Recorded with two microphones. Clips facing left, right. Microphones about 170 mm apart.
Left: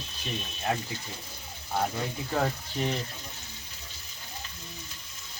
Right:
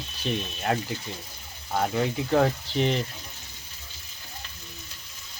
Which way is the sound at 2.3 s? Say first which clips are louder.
Right 6 dB; 90° right.